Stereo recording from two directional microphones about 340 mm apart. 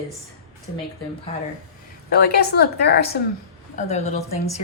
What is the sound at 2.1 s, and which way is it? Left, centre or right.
Speech, left.